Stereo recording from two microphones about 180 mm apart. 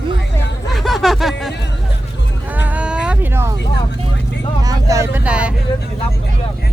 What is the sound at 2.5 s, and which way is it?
Baby cry, 10° right (ahead or behind).